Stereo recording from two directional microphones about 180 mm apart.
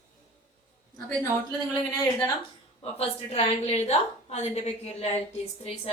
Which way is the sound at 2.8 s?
35° left (ahead or behind).